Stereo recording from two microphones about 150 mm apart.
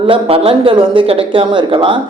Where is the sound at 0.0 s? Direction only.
40° right (ahead or behind).